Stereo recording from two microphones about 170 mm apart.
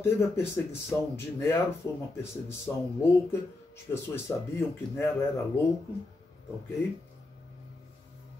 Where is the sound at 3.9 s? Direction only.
15° left (ahead or behind).